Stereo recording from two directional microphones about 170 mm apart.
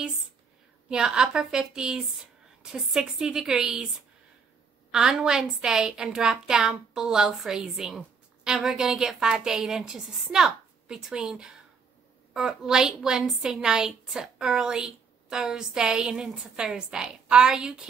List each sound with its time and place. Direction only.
0.8 s a woman's voice: 5° right (ahead or behind)
4.9 s a woman's voice: 5° right (ahead or behind)